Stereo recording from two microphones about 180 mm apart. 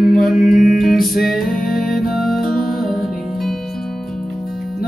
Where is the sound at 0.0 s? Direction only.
Centre (ahead or behind).